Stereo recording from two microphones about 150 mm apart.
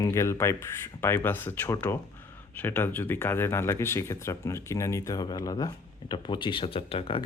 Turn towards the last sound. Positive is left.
turn(degrees=35)  # may be behind; listen again after turning